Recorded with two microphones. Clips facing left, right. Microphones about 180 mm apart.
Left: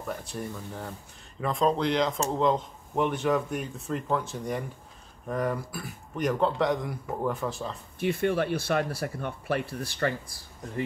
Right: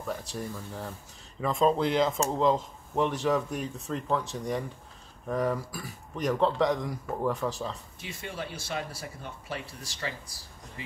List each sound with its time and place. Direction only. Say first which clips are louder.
0.0 s speech: even; centre (ahead or behind)
8.0 s speech: left 14 dB; 60° left (ahead or behind)